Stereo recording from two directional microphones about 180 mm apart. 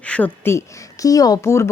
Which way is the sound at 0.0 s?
5° left (ahead or behind).